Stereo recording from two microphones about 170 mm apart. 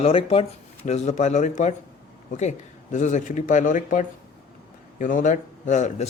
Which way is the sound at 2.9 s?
45° left (ahead or behind).